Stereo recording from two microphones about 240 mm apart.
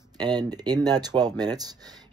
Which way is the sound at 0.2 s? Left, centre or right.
Centre.